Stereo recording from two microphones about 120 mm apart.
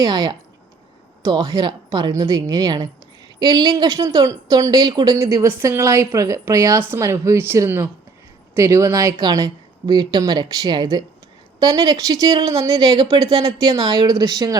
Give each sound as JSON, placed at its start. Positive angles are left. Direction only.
{"t": 0.0, "sound": "a woman's voice", "side_deg": -30}